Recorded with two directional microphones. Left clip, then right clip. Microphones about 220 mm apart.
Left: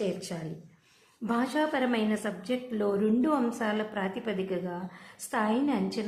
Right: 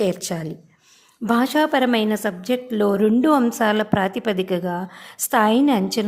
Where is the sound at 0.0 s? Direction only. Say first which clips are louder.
Right 11 dB; 45° right (ahead or behind).